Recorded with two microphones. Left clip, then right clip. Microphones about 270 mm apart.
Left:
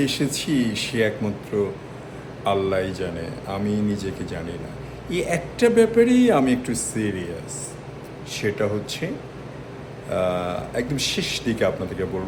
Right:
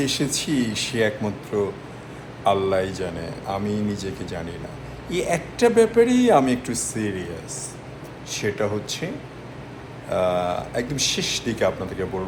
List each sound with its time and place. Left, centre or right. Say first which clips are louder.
0.0 s a man's voice: even; centre
8.3 s speech: left 1 dB; centre
10.1 s speech: right 2 dB; centre